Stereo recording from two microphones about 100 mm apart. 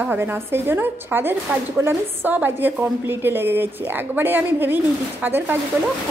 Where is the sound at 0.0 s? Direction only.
20° right (ahead or behind).